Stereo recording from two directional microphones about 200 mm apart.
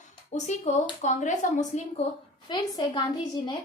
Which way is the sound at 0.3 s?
35° left (ahead or behind).